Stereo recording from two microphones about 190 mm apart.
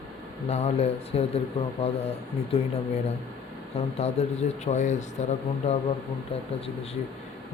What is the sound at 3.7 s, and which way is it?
Speech, 35° left (ahead or behind).